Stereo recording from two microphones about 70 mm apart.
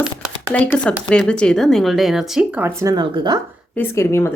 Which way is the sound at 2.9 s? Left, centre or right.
Right.